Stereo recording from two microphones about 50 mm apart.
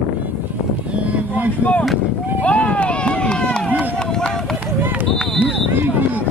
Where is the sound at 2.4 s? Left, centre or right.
Left.